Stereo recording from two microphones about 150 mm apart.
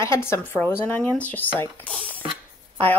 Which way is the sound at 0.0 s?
20° left (ahead or behind).